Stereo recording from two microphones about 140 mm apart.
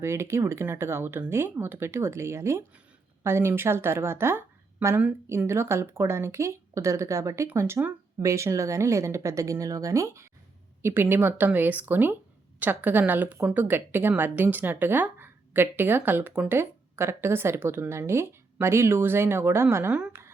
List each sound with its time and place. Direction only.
0.0 s a woman's voice: 20° right (ahead or behind)